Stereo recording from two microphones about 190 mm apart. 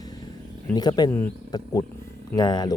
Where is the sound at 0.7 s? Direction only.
20° left (ahead or behind).